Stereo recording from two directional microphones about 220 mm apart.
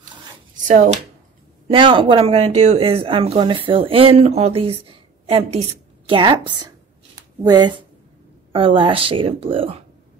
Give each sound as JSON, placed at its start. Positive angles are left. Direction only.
{"t": 0.7, "sound": "speech", "side_deg": -35}
{"t": 1.7, "sound": "speech", "side_deg": -20}